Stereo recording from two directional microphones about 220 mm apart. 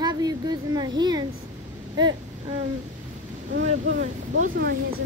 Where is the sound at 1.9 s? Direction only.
20° right (ahead or behind).